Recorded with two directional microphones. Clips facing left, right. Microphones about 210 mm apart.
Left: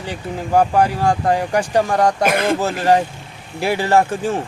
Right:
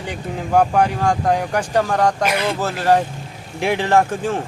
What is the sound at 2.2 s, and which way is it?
Speech, 50° left (ahead or behind).